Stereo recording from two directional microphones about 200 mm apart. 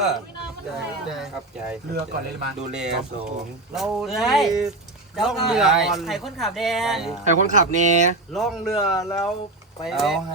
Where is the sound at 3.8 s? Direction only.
Centre (ahead or behind).